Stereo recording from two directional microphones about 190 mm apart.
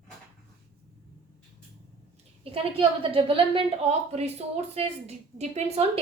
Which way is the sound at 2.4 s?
30° right (ahead or behind).